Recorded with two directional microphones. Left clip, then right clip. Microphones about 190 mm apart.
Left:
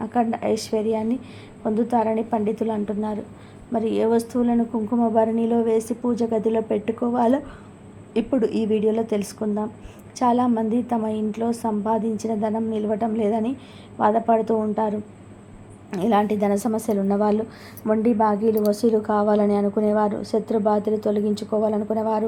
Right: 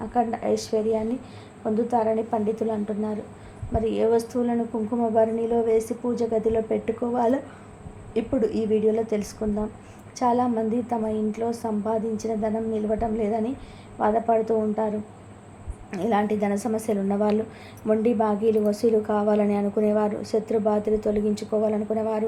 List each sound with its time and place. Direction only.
0.0 s a woman's voice: 25° left (ahead or behind)